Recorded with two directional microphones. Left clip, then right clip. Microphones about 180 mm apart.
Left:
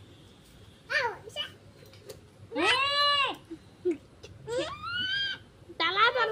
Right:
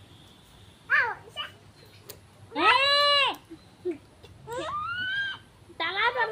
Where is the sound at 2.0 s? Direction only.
5° right (ahead or behind).